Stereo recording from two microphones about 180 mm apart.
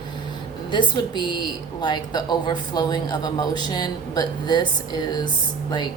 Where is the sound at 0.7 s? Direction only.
25° left (ahead or behind).